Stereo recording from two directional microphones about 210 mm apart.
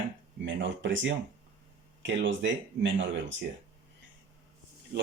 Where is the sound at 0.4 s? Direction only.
60° right (ahead or behind).